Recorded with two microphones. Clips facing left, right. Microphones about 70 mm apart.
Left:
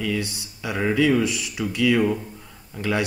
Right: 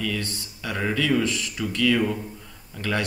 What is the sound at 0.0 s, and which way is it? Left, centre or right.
Speech, centre.